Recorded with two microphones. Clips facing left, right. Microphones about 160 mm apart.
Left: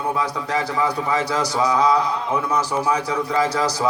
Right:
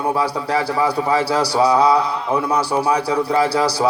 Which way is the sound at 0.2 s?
35° right (ahead or behind).